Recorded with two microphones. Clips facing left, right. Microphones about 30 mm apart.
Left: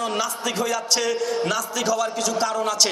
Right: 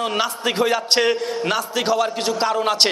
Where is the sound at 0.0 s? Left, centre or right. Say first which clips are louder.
Right 3 dB; right.